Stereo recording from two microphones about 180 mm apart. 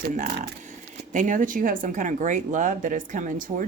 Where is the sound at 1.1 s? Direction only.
45° right (ahead or behind).